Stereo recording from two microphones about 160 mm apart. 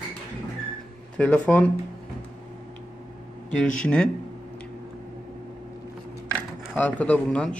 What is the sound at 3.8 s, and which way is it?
Speech, 5° left (ahead or behind).